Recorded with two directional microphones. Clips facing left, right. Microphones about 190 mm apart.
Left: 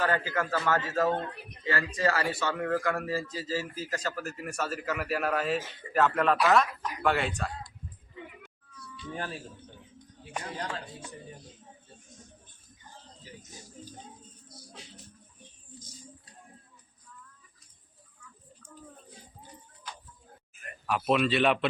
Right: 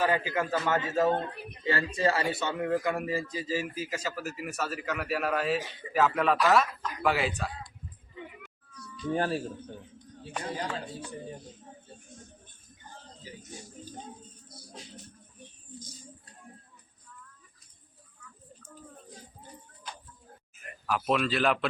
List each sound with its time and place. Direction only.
0.0 s a man's voice: 15° right (ahead or behind)
8.7 s music: centre (ahead or behind)
9.1 s speech: 35° right (ahead or behind)
20.8 s a man's voice: centre (ahead or behind)